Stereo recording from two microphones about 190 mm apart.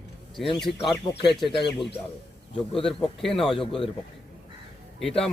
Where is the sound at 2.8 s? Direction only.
Centre (ahead or behind).